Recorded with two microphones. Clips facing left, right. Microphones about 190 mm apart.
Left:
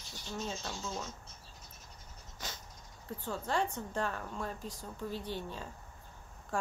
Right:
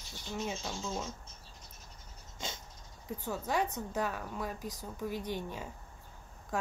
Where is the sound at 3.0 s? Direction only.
10° right (ahead or behind).